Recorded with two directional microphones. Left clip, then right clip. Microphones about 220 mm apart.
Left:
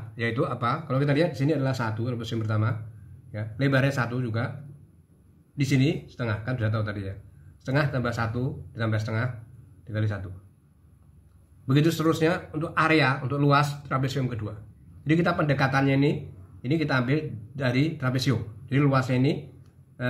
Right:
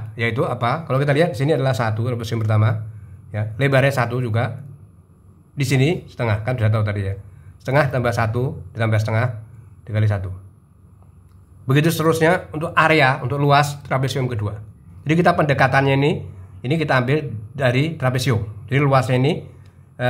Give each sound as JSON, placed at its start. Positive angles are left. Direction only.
{"t": 0.1, "sound": "speech", "side_deg": -30}
{"t": 5.6, "sound": "speech", "side_deg": -40}
{"t": 11.6, "sound": "speech", "side_deg": -35}